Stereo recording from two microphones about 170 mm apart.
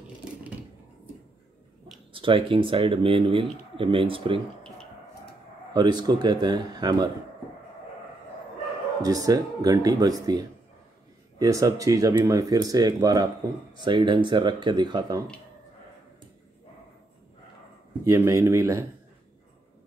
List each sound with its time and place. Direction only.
2.1 s speech: 30° right (ahead or behind)
5.7 s speech: 25° right (ahead or behind)
9.0 s speech: 20° right (ahead or behind)
18.0 s speech: 15° right (ahead or behind)